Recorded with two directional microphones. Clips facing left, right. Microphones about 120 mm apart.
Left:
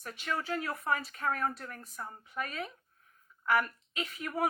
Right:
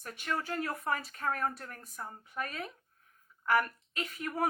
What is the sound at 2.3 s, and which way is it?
Speech, 40° right (ahead or behind).